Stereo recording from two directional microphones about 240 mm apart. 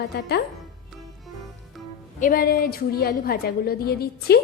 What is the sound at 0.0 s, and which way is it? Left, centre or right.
Speech, left.